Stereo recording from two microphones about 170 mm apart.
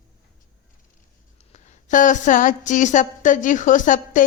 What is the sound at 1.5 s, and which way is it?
A woman's voice, 45° left (ahead or behind).